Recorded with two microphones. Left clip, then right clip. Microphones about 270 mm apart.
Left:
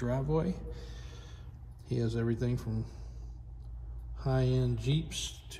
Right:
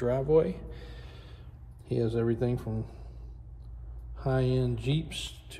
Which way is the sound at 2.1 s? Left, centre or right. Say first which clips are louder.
Right 5 dB; centre.